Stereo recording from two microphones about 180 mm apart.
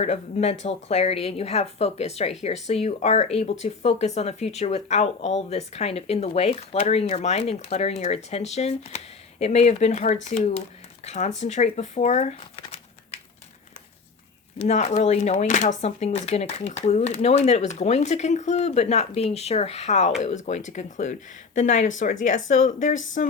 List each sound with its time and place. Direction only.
0.0 s speech: 35° left (ahead or behind)
14.6 s speech: 35° left (ahead or behind)